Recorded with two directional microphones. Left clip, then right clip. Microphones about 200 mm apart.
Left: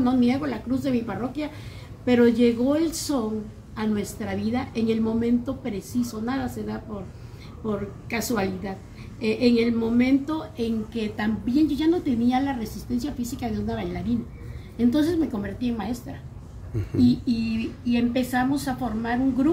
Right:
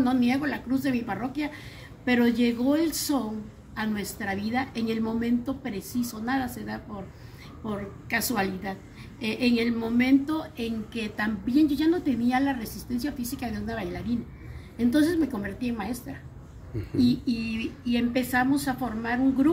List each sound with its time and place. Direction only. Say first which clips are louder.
0.0 s a woman's voice: left 2 dB; 10° right (ahead or behind)